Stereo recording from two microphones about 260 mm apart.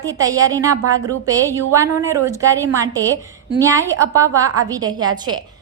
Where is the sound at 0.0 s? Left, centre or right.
Centre.